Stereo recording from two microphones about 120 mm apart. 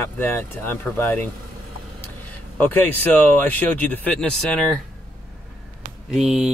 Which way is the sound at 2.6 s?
15° left (ahead or behind).